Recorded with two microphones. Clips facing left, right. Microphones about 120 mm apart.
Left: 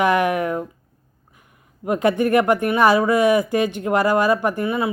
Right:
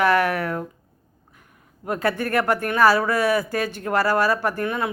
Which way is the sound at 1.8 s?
15° left (ahead or behind).